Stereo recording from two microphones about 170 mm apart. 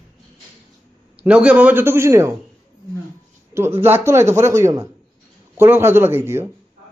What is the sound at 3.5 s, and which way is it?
A man's voice, 15° right (ahead or behind).